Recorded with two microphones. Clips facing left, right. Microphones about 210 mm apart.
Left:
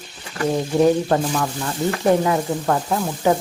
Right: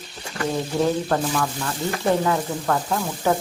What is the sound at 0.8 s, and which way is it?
Speech, 20° left (ahead or behind).